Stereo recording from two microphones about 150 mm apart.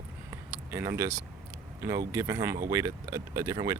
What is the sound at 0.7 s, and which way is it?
Speech, 15° right (ahead or behind).